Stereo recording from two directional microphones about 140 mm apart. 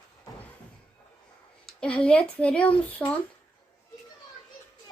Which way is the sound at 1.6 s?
5° left (ahead or behind).